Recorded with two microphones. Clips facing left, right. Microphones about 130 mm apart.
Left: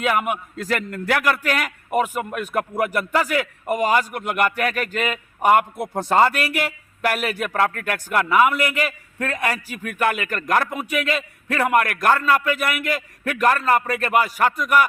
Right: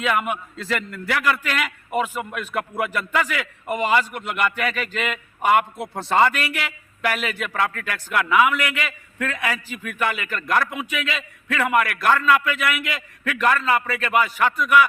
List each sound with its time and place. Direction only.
0.5 s a man's voice: 45° left (ahead or behind)
5.7 s speech: 15° left (ahead or behind)
6.1 s a man's voice: 40° left (ahead or behind)